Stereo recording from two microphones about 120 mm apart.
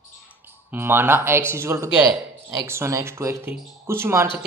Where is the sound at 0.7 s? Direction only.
20° right (ahead or behind).